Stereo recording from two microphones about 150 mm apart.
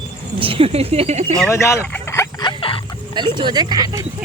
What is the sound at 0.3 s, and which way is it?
Speech, 35° right (ahead or behind).